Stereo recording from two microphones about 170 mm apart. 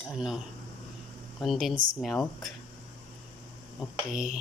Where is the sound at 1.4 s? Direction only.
Centre (ahead or behind).